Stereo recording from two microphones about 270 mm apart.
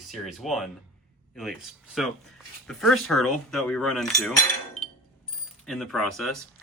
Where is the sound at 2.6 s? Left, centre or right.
Centre.